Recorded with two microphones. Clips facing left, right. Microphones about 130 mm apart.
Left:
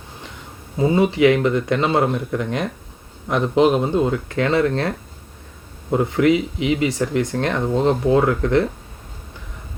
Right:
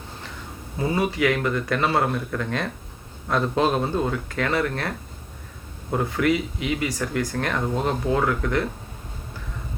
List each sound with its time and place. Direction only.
0.8 s speech: 20° left (ahead or behind)
5.9 s speech: 20° left (ahead or behind)